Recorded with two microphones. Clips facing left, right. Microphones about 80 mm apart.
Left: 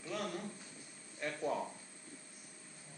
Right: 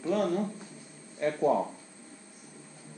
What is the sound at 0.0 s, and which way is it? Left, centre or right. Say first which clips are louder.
Speech: right 13 dB; right.